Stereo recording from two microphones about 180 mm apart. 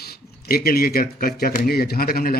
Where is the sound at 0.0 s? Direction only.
60° left (ahead or behind).